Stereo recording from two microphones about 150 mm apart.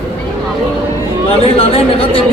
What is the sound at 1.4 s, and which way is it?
Speech, 40° left (ahead or behind).